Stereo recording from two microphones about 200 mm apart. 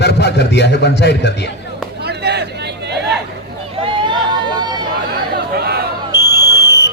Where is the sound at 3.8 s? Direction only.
20° right (ahead or behind).